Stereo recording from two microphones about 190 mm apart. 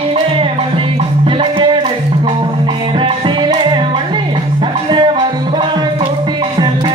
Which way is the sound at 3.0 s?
25° right (ahead or behind).